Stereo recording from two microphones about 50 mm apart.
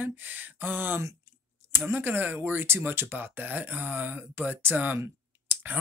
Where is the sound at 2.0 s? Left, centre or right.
Right.